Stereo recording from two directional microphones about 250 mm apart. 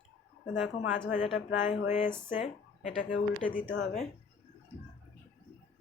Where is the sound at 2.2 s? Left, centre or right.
Left.